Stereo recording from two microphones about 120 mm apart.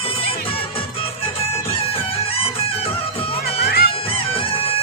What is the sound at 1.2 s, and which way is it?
Music, 50° left (ahead or behind).